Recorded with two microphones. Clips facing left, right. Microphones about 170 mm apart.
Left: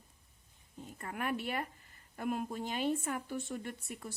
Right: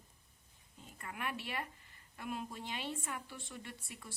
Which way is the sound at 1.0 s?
45° left (ahead or behind).